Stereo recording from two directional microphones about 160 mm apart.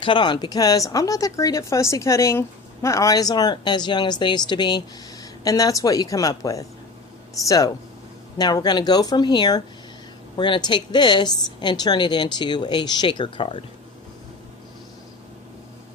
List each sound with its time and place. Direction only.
0.0 s speech: 30° left (ahead or behind)